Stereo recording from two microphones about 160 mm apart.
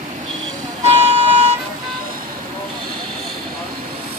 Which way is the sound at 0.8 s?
40° right (ahead or behind).